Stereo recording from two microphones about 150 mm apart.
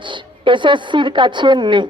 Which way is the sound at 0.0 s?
35° right (ahead or behind).